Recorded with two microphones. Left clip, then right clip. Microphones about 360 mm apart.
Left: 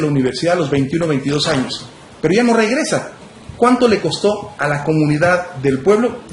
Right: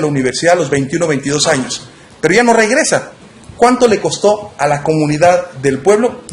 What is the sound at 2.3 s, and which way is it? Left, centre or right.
A man's voice, centre.